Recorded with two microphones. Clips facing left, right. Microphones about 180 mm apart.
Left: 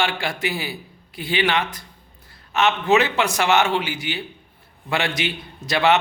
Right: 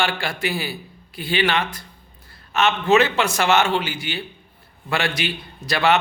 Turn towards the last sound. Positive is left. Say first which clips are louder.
# left 1 dB
turn(degrees=20)  # may be behind; listen again after turning